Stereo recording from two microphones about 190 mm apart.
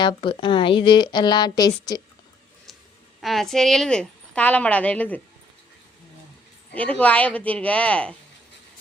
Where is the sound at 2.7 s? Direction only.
Centre (ahead or behind).